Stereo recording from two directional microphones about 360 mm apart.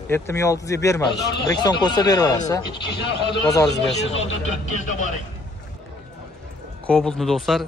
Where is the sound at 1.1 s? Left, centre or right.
Left.